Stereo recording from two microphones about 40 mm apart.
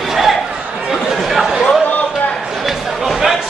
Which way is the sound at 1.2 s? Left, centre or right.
Centre.